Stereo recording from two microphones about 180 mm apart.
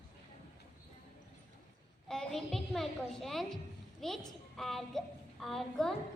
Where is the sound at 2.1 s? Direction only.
Centre (ahead or behind).